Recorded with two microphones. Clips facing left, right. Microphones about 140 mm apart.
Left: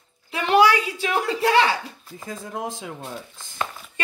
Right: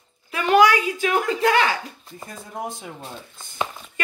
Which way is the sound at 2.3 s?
90° left.